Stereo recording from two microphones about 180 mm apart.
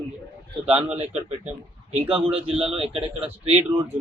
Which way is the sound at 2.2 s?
30° right (ahead or behind).